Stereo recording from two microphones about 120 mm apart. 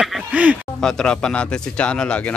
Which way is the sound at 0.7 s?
5° left (ahead or behind).